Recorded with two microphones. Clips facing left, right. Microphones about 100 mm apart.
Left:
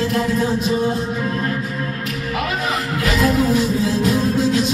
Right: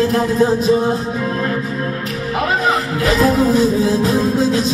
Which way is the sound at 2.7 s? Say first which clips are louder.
Right 5 dB; 35° right (ahead or behind).